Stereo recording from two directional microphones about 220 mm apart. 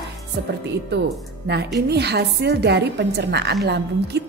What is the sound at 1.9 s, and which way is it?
A woman's voice, 50° right (ahead or behind).